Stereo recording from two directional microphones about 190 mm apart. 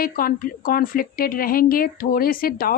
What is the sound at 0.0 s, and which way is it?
Speech, 50° left (ahead or behind).